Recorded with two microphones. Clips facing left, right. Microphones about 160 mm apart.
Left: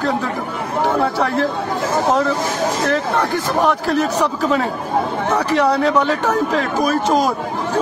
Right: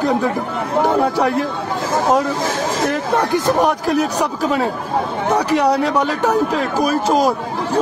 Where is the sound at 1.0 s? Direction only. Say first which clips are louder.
Right 1 dB; 10° right (ahead or behind).